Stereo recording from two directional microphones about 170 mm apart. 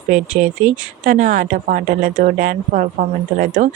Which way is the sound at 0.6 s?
50° right (ahead or behind).